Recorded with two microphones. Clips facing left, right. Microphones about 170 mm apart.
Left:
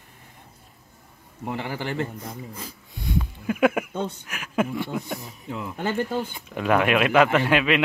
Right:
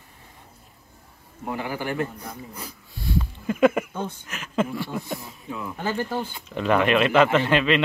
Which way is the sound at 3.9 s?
70° left (ahead or behind).